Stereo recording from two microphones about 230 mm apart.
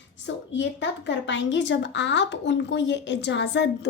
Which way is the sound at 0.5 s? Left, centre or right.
Left.